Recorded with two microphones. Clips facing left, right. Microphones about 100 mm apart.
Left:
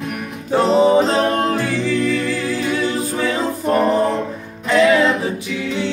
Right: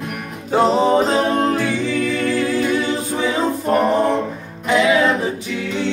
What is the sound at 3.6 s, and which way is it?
Music, 5° right (ahead or behind).